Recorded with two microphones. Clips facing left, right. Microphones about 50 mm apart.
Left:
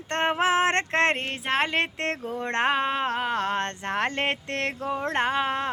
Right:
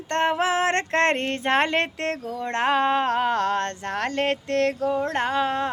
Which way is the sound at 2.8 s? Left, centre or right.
Centre.